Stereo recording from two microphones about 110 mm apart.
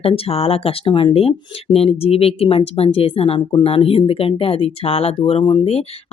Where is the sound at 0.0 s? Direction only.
60° left (ahead or behind).